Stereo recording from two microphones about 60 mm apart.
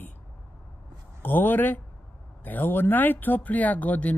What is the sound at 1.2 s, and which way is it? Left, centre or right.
Speech, left.